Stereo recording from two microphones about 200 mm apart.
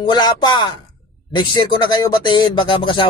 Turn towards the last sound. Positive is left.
turn(degrees=25)  # may be behind; listen again after turning